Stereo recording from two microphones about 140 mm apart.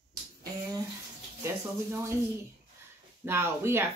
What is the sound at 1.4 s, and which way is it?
Speech, 20° right (ahead or behind).